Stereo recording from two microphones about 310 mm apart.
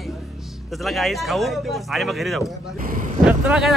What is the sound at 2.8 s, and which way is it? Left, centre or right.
Speech, right.